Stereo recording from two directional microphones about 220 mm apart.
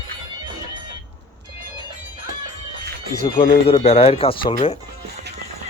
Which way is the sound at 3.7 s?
25° left (ahead or behind).